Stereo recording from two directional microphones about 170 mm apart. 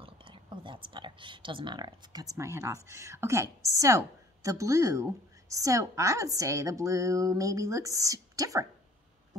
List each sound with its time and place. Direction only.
0.0 s speech: 30° right (ahead or behind)